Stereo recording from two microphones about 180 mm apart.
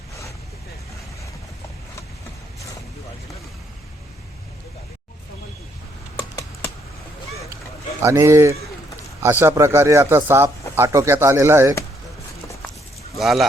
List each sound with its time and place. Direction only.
8.0 s speech: 15° right (ahead or behind)
13.1 s speech: centre (ahead or behind)